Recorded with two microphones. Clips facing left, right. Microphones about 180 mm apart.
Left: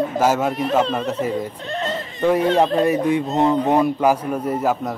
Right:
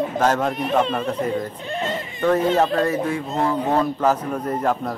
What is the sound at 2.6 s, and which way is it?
Speech, 15° left (ahead or behind).